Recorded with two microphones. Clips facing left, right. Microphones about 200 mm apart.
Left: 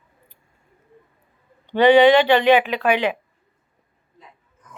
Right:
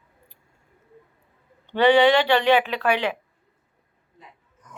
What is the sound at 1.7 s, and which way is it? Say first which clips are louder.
Speech: left 4 dB; 20° left (ahead or behind).